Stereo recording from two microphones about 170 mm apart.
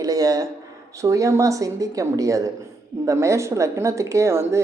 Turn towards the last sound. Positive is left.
turn(degrees=-15)  # may be behind; listen again after turning